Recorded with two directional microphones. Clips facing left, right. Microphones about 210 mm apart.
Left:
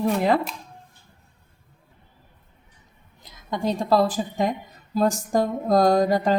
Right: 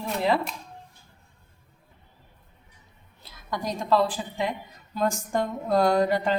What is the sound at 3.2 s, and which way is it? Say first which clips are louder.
A woman's voice: left 5 dB; 20° left (ahead or behind).